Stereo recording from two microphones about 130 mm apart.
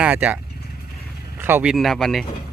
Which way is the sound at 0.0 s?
10° right (ahead or behind).